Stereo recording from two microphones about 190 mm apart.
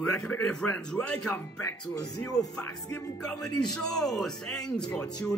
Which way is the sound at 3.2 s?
5° left (ahead or behind).